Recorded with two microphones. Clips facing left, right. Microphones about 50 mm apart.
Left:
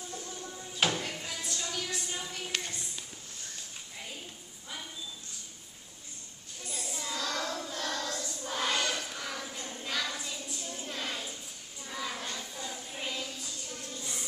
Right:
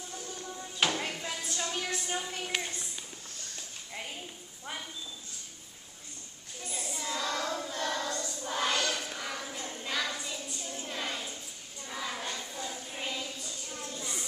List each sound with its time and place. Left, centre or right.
0.1 s music: centre
1.4 s music: right
2.4 s a sound: centre
6.7 s child singing: centre
8.9 s a sound: centre
11.9 s child singing: centre